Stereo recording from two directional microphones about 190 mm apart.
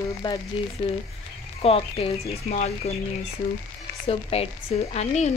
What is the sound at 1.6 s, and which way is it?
A woman's voice, 30° left (ahead or behind).